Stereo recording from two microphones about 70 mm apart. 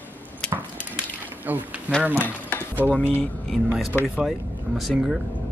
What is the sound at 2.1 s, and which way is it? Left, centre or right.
Speech, left.